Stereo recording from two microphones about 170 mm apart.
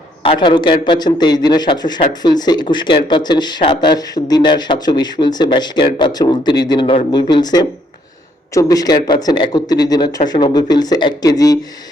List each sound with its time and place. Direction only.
0.2 s speech: 30° left (ahead or behind)